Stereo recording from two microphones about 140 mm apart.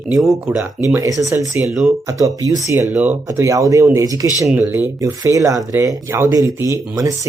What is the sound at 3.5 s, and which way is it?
Speech, 25° right (ahead or behind).